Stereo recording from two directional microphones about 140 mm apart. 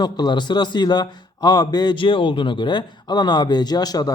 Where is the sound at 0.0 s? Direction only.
30° left (ahead or behind).